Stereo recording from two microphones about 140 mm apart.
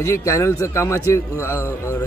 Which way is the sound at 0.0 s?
20° left (ahead or behind).